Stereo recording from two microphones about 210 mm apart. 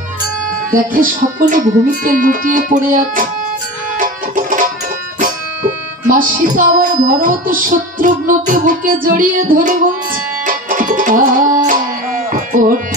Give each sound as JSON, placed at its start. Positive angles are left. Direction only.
{"t": 1.5, "sound": "speech", "side_deg": -40}
{"t": 4.0, "sound": "music", "side_deg": -40}
{"t": 6.0, "sound": "speech", "side_deg": -40}
{"t": 10.4, "sound": "music", "side_deg": -40}